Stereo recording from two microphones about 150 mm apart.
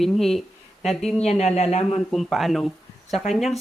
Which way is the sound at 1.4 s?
45° left (ahead or behind).